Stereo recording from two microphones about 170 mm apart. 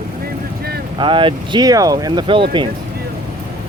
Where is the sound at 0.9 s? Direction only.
30° right (ahead or behind).